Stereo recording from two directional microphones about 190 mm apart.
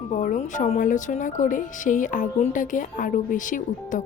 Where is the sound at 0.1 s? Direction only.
40° left (ahead or behind).